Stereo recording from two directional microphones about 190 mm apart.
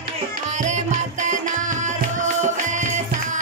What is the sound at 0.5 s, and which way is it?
Music, 40° right (ahead or behind).